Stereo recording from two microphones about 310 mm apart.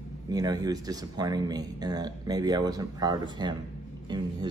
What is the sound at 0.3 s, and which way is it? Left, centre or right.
Speech, centre.